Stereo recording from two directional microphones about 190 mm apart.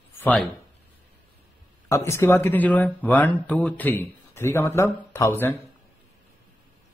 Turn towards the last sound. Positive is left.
turn(degrees=15)  # may be behind; listen again after turning